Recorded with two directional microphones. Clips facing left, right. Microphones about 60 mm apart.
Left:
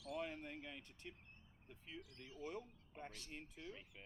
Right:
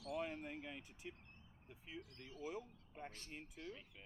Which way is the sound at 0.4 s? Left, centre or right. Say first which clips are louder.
Right 2 dB; centre.